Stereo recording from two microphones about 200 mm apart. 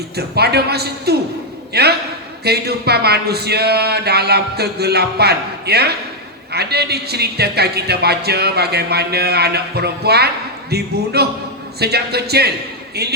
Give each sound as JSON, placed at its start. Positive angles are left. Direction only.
{"t": 0.2, "sound": "a man's voice", "side_deg": -55}